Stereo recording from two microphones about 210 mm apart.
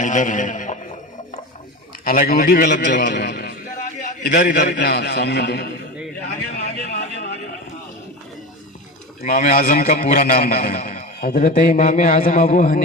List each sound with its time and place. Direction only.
0.0 s a man's voice: 35° left (ahead or behind)
2.0 s a man's voice: 45° left (ahead or behind)
6.2 s vehicle: 50° left (ahead or behind)
9.2 s a man's voice: 40° left (ahead or behind)